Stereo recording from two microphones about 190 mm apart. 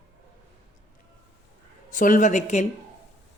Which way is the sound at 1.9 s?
45° left (ahead or behind).